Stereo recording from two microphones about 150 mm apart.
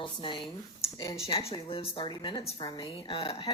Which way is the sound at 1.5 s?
40° left (ahead or behind).